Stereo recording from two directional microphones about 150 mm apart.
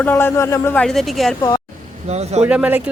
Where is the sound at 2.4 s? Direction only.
10° right (ahead or behind).